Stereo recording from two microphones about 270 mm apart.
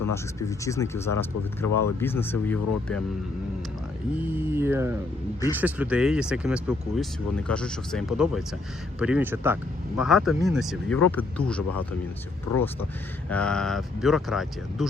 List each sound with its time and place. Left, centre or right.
0.1 s speech: centre
4.3 s speech: centre
12.5 s speech: left
13.3 s speech: centre